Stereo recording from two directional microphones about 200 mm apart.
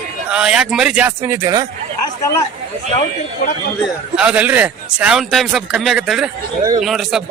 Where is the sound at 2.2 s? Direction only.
15° left (ahead or behind).